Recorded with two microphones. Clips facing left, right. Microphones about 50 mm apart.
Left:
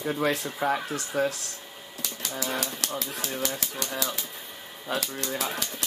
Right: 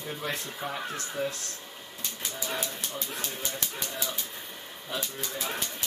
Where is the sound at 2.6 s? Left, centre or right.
Left.